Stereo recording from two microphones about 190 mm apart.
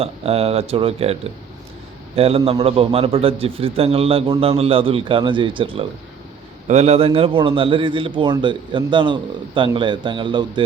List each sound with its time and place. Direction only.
0.0 s a man's voice: 30° right (ahead or behind)